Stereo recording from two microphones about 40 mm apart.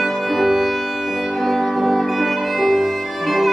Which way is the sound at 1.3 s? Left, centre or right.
Centre.